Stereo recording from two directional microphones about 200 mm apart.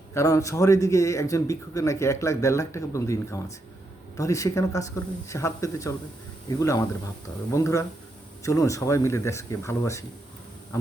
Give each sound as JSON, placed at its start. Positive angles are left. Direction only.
{"t": 0.1, "sound": "a man's voice", "side_deg": 15}